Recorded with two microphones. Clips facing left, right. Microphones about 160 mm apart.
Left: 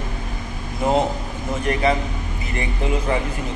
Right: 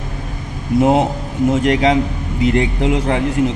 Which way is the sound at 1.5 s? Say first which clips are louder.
Right 5 dB; 85° right.